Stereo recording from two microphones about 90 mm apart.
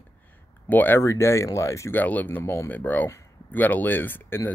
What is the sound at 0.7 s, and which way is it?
Speech, 20° left (ahead or behind).